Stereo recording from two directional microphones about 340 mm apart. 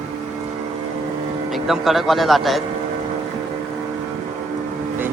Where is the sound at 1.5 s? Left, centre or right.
Centre.